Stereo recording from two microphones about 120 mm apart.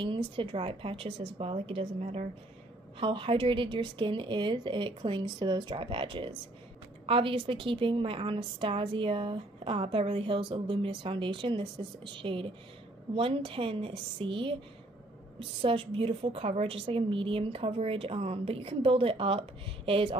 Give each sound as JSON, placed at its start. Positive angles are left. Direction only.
{"t": 0.0, "sound": "a woman's voice", "side_deg": -40}